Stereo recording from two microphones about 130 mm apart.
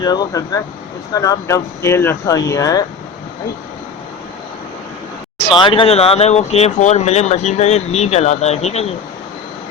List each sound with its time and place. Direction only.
0.0 s speech: 30° left (ahead or behind)
5.5 s speech: 40° left (ahead or behind); by 8.9 s 55° left (ahead or behind)